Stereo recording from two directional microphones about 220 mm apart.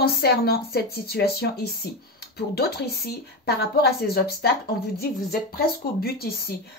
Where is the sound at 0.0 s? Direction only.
45° left (ahead or behind).